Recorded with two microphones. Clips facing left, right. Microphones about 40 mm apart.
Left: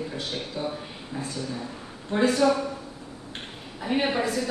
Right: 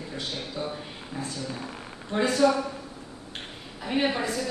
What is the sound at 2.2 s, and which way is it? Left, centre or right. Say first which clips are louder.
Speech: left 1 dB; left.